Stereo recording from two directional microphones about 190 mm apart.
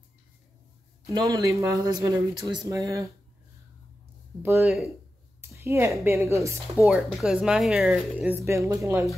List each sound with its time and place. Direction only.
1.0 s speech: 15° right (ahead or behind)
4.4 s speech: 15° right (ahead or behind)
4.6 s speech: centre (ahead or behind)
5.5 s a sound: 15° right (ahead or behind)
6.0 s speech: 15° right (ahead or behind)
6.9 s speech: 5° right (ahead or behind)